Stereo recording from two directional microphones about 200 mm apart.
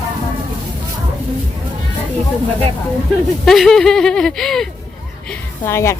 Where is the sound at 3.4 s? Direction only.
Centre (ahead or behind).